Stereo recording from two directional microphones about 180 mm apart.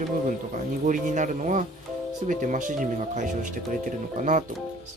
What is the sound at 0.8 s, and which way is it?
Speech, 45° right (ahead or behind).